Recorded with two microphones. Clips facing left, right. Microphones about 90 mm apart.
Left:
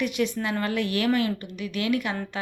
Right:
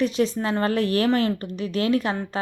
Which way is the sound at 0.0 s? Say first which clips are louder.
Right 4 dB; 30° right (ahead or behind).